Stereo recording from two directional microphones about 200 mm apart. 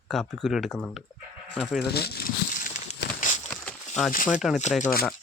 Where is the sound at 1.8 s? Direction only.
55° left (ahead or behind).